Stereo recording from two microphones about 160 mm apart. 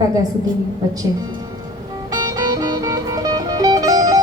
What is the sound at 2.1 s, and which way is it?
Music, 25° right (ahead or behind).